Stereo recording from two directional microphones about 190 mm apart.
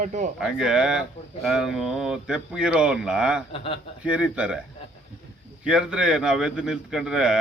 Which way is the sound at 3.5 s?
30° left (ahead or behind).